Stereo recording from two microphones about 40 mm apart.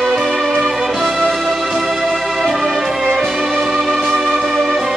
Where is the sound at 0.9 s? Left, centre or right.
Centre.